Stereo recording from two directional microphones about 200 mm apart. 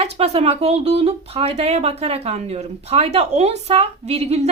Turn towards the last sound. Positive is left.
turn(degrees=-30)  # may be behind; listen again after turning